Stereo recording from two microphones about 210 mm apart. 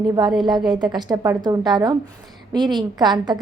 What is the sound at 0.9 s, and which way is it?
A woman's voice, 20° right (ahead or behind).